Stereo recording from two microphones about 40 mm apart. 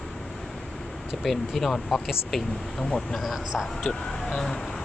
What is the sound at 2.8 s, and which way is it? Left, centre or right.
Speech, left.